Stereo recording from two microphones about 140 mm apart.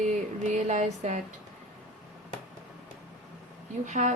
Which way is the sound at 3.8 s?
60° right (ahead or behind).